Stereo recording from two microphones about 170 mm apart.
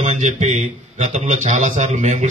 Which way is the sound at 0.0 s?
45° right (ahead or behind).